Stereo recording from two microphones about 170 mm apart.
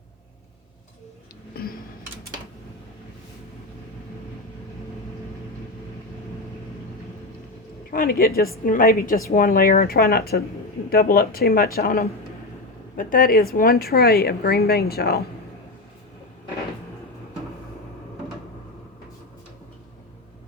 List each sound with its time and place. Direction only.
1.5 s tick-tock: 65° left (ahead or behind)
7.9 s speech: 60° left (ahead or behind)